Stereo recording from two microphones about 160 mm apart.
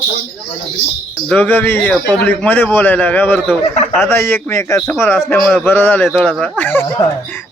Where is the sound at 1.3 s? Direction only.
10° left (ahead or behind).